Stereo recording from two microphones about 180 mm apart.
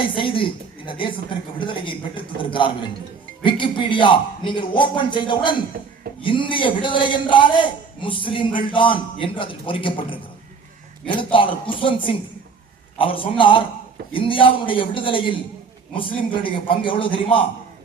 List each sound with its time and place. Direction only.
0.2 s a man's voice: 30° left (ahead or behind)
11.0 s a man's voice: 30° left (ahead or behind)